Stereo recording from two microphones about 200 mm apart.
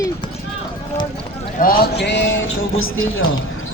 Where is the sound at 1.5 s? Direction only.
45° left (ahead or behind); by 3.3 s 90° left.